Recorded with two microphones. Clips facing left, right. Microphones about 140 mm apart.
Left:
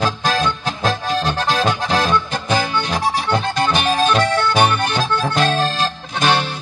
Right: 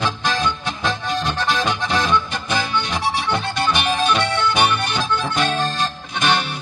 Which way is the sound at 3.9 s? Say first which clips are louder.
Left 3 dB; 40° left (ahead or behind).